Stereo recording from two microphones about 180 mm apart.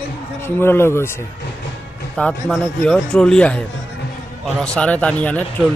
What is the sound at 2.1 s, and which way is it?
A man's voice, 5° left (ahead or behind).